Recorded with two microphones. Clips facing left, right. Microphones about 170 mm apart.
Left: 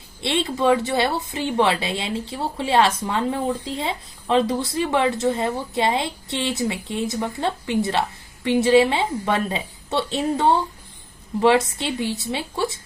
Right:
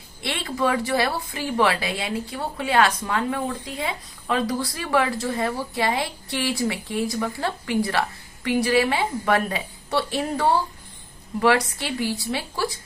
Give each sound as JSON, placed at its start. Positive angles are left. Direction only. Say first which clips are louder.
{"t": 0.2, "sound": "a woman's voice", "louder": "left 3 dB", "side_deg": 25}